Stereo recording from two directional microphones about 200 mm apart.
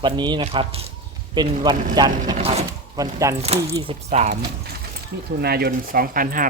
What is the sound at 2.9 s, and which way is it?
Speech, 15° right (ahead or behind).